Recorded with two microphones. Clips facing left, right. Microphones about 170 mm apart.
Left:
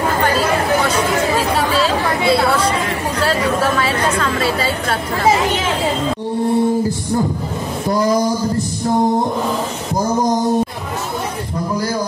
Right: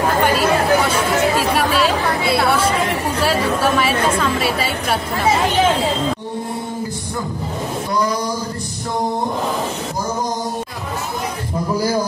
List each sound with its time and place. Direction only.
1.7 s chatter: 25° left (ahead or behind)